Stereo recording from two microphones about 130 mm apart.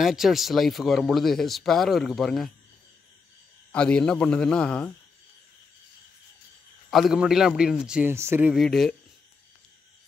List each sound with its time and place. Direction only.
0.0 s speech: centre (ahead or behind)
3.7 s a man's voice: 5° left (ahead or behind)
6.9 s speech: centre (ahead or behind)
8.1 s speech: 20° right (ahead or behind)
8.5 s speech: centre (ahead or behind)